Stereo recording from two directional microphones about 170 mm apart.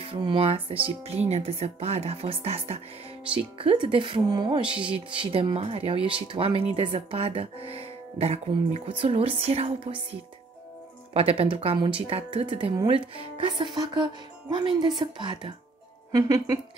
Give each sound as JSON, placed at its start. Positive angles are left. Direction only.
{"t": 0.0, "sound": "speech", "side_deg": -30}
{"t": 11.1, "sound": "a woman's voice", "side_deg": -35}